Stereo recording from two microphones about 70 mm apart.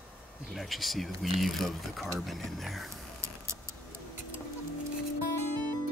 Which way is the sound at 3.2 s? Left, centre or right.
Right.